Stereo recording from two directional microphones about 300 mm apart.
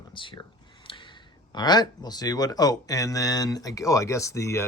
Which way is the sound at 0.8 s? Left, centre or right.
Centre.